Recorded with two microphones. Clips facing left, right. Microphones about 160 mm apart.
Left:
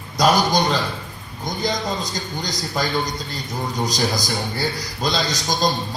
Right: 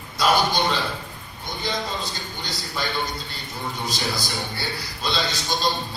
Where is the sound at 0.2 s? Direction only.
40° left (ahead or behind).